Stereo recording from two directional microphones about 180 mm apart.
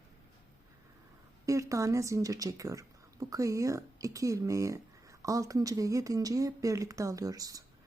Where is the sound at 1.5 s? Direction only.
15° right (ahead or behind).